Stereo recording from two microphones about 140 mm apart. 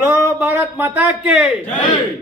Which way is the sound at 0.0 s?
20° right (ahead or behind).